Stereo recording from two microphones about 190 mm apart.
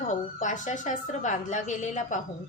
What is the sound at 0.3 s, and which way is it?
A woman's voice, 40° left (ahead or behind).